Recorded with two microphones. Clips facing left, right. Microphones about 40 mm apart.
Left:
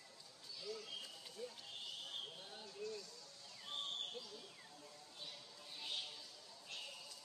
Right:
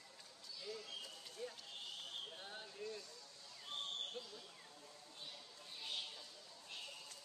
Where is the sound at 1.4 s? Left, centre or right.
Right.